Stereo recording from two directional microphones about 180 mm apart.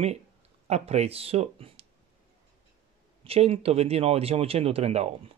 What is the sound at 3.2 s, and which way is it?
Speech, 35° right (ahead or behind).